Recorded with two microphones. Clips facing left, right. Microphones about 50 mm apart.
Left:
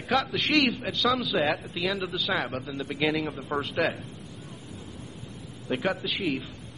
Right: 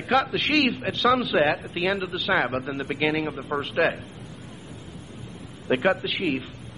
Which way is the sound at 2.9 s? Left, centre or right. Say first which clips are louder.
Right 2 dB; centre.